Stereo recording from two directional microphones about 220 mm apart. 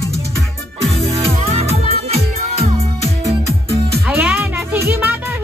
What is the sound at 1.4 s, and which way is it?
Music, 30° right (ahead or behind).